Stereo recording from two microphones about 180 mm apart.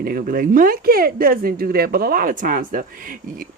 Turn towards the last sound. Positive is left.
turn(degrees=-50)  # may be behind; listen again after turning